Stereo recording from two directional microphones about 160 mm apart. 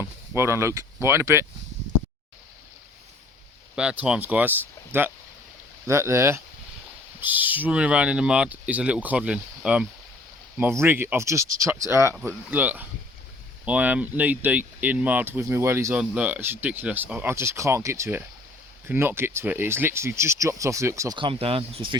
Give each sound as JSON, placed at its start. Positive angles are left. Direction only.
{"t": 0.0, "sound": "speech", "side_deg": -15}
{"t": 3.8, "sound": "speech", "side_deg": -5}
{"t": 21.2, "sound": "speech", "side_deg": -35}